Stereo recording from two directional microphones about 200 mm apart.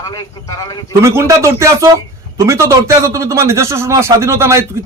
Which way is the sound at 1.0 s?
15° right (ahead or behind).